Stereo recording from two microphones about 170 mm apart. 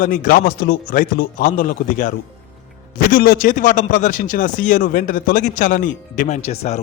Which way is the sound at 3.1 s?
60° left (ahead or behind).